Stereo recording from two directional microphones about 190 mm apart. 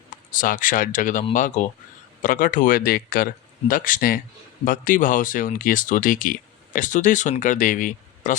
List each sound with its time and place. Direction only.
0.3 s speech: 45° left (ahead or behind)